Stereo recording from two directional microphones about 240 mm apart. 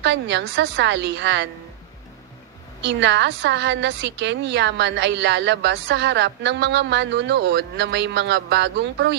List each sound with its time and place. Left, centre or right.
0.0 s a woman's voice: right
2.8 s a woman's voice: right